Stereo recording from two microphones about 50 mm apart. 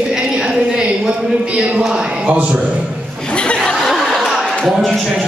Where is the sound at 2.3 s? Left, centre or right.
Right.